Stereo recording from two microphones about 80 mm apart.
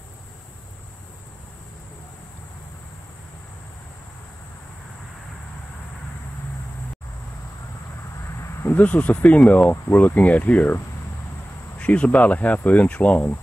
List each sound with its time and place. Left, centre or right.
8.3 s a sound: left
8.7 s speech: centre
11.8 s speech: centre